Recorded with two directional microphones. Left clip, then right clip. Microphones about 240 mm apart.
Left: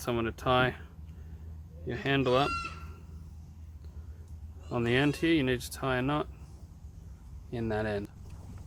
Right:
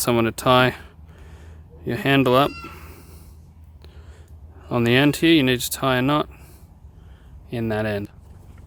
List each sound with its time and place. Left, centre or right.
0.0 s speech: right
1.9 s speech: right
4.7 s speech: right
7.5 s speech: right